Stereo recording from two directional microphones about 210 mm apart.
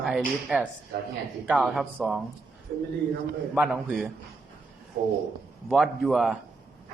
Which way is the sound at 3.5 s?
5° right (ahead or behind).